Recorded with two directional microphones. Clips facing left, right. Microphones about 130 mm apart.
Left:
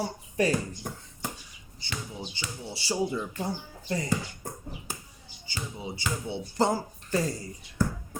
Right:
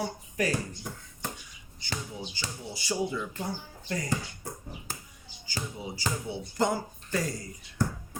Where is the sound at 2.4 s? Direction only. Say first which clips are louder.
Left 1 dB; 25° left (ahead or behind).